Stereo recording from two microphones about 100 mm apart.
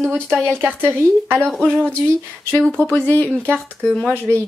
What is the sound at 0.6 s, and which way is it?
Speech, 25° right (ahead or behind).